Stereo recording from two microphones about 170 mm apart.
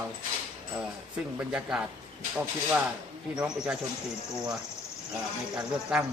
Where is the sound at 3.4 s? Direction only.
5° right (ahead or behind).